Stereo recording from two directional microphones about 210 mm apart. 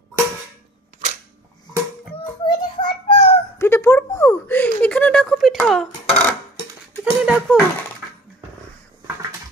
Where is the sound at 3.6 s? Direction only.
15° left (ahead or behind).